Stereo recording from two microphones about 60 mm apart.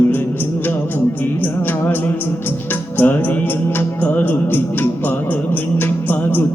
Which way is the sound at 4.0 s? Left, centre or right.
Left.